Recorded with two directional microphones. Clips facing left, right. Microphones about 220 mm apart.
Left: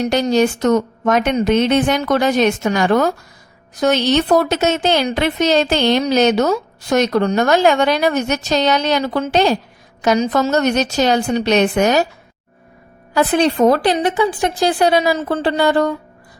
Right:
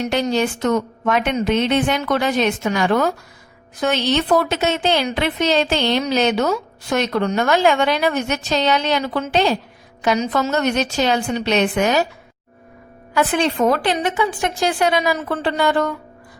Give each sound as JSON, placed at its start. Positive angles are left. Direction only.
{"t": 0.1, "sound": "a woman's voice", "side_deg": 40}
{"t": 13.1, "sound": "speech", "side_deg": 35}